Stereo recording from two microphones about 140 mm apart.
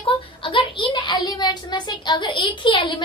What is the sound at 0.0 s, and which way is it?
Speech, 40° left (ahead or behind).